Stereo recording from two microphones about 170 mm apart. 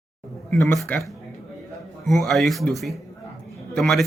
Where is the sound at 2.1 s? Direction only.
Centre (ahead or behind).